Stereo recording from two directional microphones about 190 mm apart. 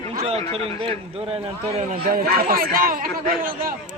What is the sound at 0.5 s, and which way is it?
A man's voice, 30° right (ahead or behind).